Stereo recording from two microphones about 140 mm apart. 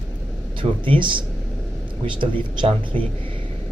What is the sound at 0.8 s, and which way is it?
Speech, 35° right (ahead or behind).